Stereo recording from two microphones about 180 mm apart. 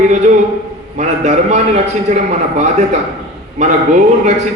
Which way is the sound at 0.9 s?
40° right (ahead or behind).